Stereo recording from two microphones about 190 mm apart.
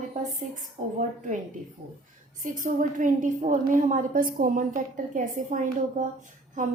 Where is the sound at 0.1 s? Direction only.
45° right (ahead or behind).